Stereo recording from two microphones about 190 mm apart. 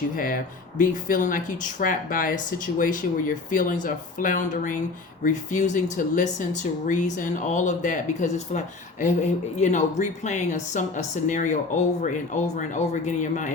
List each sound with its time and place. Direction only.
0.2 s speech: 50° left (ahead or behind)